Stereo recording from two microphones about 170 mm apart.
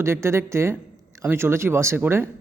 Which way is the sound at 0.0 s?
15° right (ahead or behind).